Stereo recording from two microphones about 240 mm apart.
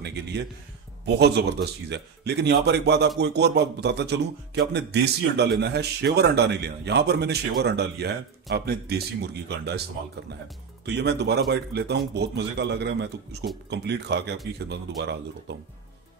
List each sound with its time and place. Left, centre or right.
0.0 s a sound: right
1.0 s speech: right
10.9 s speech: right